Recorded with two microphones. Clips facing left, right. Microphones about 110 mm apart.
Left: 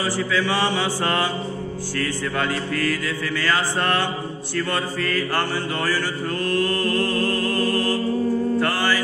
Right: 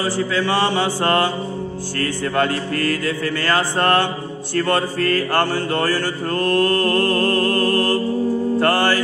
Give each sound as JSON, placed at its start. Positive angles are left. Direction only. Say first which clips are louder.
{"t": 0.0, "sound": "chant", "louder": "right 2 dB", "side_deg": -25}
{"t": 1.0, "sound": "mantra", "louder": "right 6 dB", "side_deg": -50}
{"t": 2.3, "sound": "mantra", "louder": "right 6 dB", "side_deg": -45}
{"t": 5.3, "sound": "mantra", "louder": "right 5 dB", "side_deg": -50}